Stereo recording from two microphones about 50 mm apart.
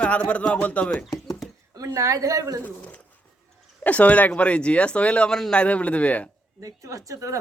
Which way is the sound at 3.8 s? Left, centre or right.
Left.